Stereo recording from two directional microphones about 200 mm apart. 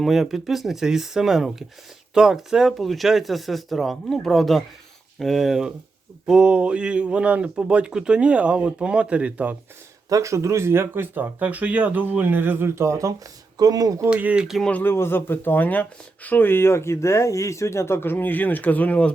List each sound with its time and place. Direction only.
0.0 s speech: centre (ahead or behind); by 14.1 s 15° right (ahead or behind)
14.1 s speech: 5° right (ahead or behind)